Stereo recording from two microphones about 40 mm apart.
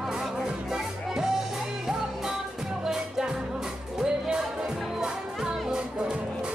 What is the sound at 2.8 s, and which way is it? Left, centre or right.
Music, centre.